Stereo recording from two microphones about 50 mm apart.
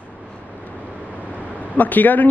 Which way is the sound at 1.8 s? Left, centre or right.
Left.